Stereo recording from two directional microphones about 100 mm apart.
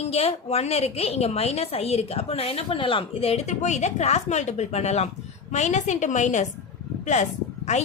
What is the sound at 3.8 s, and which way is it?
A woman's voice, 90° left.